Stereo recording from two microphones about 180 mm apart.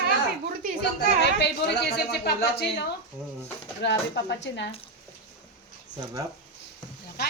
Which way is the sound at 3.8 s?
70° left (ahead or behind).